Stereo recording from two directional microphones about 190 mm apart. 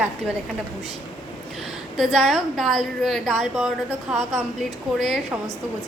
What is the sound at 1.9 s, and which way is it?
A woman's voice, centre (ahead or behind).